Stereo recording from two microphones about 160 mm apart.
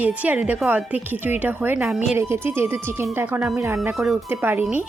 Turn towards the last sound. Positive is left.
turn(degrees=-15)  # may be behind; listen again after turning